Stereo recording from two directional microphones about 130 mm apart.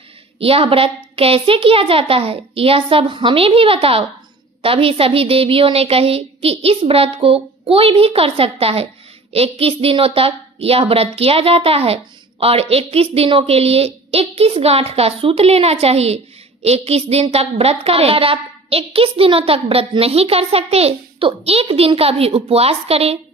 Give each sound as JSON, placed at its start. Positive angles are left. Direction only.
{"t": 0.4, "sound": "a woman's voice", "side_deg": -45}